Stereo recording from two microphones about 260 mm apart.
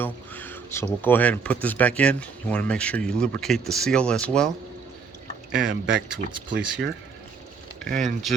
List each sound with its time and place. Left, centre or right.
0.0 s a sound: centre
1.0 s speech: centre
5.5 s speech: right
7.9 s speech: right